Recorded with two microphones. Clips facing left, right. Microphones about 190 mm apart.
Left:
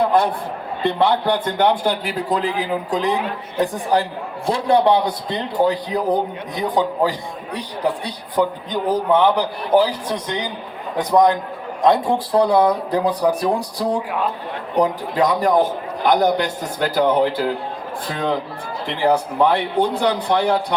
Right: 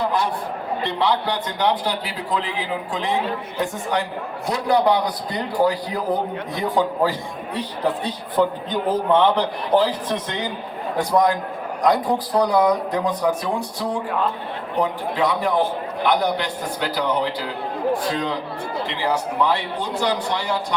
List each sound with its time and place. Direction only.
0.0 s a sound: 55° left (ahead or behind)
0.9 s a man's voice: 55° left (ahead or behind); by 10.3 s 10° left (ahead or behind)
10.9 s a man's voice: 20° left (ahead or behind); by 20.7 s 60° left (ahead or behind)